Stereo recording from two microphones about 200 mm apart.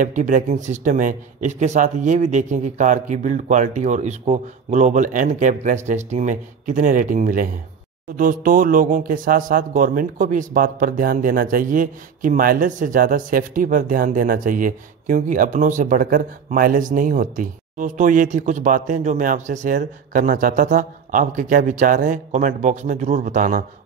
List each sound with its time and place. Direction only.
0.0 s speech: 40° right (ahead or behind)